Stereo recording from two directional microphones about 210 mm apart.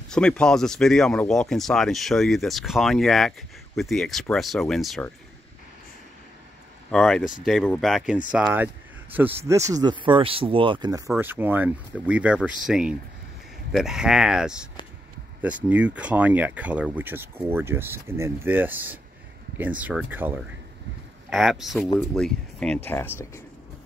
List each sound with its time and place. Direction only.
0.1 s speech: 5° left (ahead or behind)
6.9 s speech: 5° left (ahead or behind)